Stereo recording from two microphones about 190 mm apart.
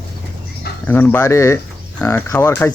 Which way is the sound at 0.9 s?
10° left (ahead or behind).